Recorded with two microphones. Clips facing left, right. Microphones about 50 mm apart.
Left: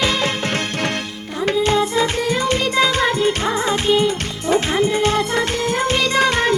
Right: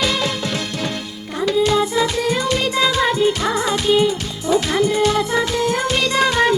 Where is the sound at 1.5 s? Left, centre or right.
Left.